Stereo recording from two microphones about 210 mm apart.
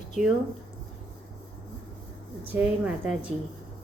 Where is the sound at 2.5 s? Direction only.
10° right (ahead or behind).